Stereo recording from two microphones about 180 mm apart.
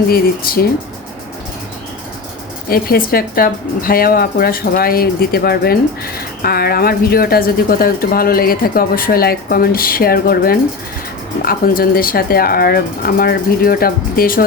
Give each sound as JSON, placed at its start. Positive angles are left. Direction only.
{"t": 0.1, "sound": "speech", "side_deg": 55}
{"t": 2.6, "sound": "speech", "side_deg": 60}